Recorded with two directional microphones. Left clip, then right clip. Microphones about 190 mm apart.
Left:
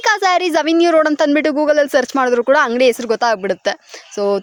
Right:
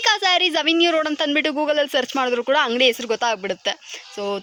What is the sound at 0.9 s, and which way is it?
Speech, 20° left (ahead or behind).